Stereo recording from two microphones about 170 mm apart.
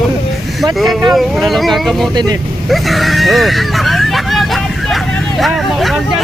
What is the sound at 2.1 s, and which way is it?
Speech, 25° right (ahead or behind).